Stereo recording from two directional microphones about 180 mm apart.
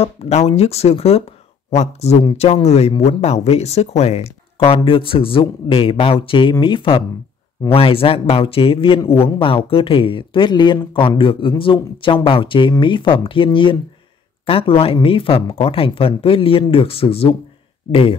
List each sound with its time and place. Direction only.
0.0 s speech: 35° left (ahead or behind)